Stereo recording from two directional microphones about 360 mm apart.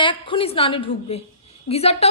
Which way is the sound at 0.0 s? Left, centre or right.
Centre.